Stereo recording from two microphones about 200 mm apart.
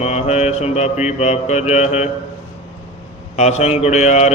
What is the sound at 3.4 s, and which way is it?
Mantra, 35° left (ahead or behind).